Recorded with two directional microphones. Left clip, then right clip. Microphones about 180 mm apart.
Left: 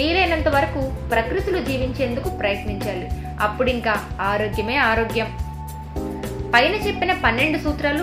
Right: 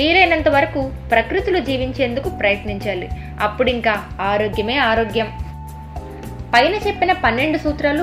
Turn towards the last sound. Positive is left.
turn(degrees=-20)  # may be behind; listen again after turning